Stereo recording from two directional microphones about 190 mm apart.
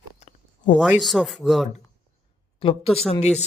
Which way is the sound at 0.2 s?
35° left (ahead or behind).